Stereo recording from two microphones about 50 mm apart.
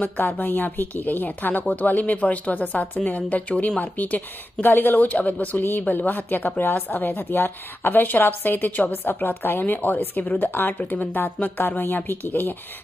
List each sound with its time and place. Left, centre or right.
0.0 s a woman's voice: left
3.8 s a woman's voice: left